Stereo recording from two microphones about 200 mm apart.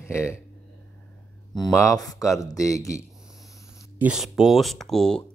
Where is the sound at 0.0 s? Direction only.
15° left (ahead or behind).